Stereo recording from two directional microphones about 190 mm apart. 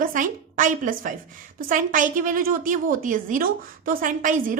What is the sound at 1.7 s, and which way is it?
A woman's voice, 45° right (ahead or behind).